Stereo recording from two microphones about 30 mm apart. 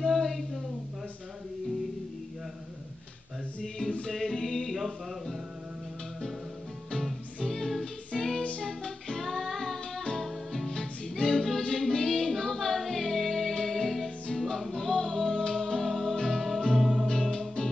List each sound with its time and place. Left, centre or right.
0.0 s a sound: centre
3.6 s music: centre
4.1 s music: centre
4.7 s a sound: centre
7.4 s music: centre
9.2 s music: centre
10.7 s music: centre
11.3 s a capella: centre
11.6 s music: centre
17.1 s music: centre